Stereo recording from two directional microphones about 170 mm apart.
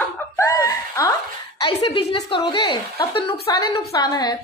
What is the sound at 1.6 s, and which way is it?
A woman's voice, 30° left (ahead or behind).